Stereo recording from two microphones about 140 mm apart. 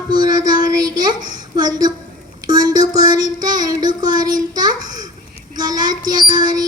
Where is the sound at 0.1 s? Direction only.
30° right (ahead or behind).